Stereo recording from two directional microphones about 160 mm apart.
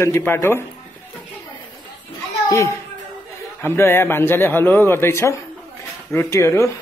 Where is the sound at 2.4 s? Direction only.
20° left (ahead or behind).